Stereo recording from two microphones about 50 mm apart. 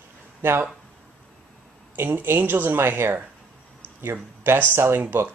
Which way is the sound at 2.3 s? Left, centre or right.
Right.